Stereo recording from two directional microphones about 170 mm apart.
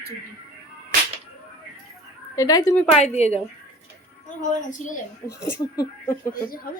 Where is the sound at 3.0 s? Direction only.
40° left (ahead or behind).